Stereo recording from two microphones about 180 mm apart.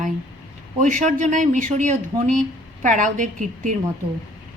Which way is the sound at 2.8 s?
45° right (ahead or behind).